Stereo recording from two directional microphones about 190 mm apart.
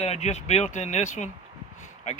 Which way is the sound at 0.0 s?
35° left (ahead or behind).